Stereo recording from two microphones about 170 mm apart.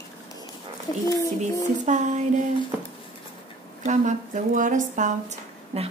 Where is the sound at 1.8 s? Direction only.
45° right (ahead or behind).